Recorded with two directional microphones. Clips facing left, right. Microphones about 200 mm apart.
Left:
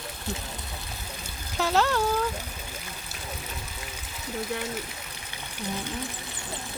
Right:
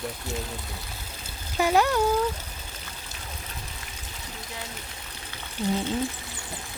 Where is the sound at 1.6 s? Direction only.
15° right (ahead or behind).